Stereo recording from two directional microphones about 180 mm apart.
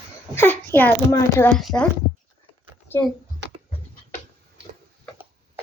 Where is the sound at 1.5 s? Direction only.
5° left (ahead or behind).